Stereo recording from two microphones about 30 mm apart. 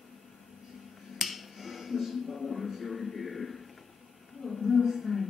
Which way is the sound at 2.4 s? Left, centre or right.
Centre.